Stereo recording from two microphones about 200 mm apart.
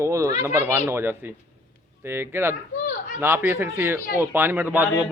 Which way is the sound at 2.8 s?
40° left (ahead or behind).